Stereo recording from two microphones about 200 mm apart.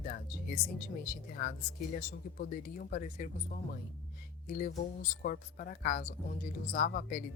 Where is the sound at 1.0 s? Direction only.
45° left (ahead or behind).